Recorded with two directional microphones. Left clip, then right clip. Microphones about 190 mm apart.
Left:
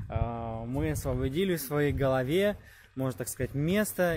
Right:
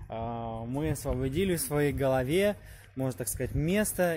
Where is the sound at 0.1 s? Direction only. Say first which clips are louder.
Even; 5° right (ahead or behind).